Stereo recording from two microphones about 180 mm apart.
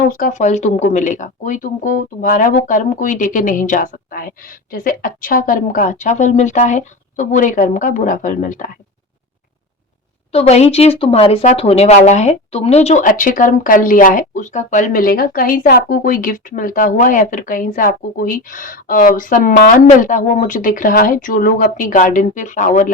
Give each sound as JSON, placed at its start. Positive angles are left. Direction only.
{"t": 0.0, "sound": "speech", "side_deg": 45}
{"t": 10.3, "sound": "speech", "side_deg": 35}